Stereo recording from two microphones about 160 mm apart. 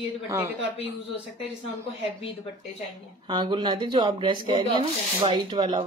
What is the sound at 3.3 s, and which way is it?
Speech, 30° right (ahead or behind).